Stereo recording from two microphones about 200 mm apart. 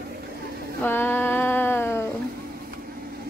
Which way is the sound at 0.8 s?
10° left (ahead or behind).